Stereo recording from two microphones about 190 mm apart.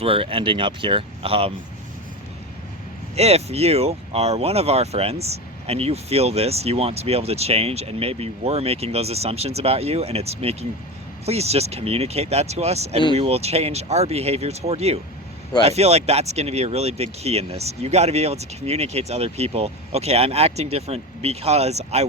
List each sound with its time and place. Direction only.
0.0 s speech: 30° right (ahead or behind)
3.2 s speech: 35° right (ahead or behind)